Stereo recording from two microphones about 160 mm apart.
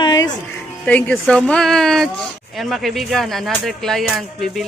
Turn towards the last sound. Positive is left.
turn(degrees=0)  # may be behind; listen again after turning